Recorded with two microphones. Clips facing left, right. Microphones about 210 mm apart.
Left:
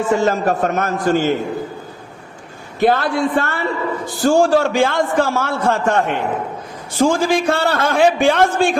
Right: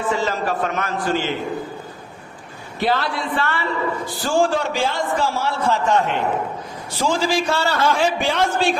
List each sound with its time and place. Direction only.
0.1 s a man's voice: 50° left (ahead or behind)
2.8 s a man's voice: 50° left (ahead or behind)